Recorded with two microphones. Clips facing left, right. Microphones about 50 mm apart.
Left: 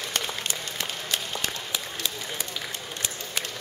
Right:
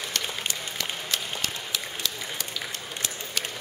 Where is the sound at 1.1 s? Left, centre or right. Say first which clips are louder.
Left 1 dB; left.